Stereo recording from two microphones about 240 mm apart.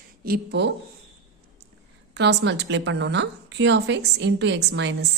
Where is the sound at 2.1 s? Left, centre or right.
Right.